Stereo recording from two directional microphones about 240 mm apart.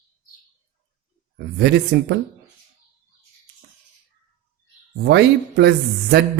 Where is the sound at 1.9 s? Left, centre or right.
Right.